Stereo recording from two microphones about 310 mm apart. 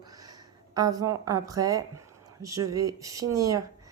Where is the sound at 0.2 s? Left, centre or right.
Centre.